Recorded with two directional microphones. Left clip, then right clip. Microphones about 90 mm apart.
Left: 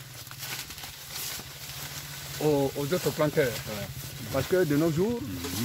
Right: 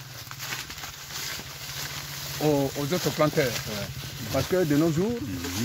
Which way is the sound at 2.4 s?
30° left (ahead or behind).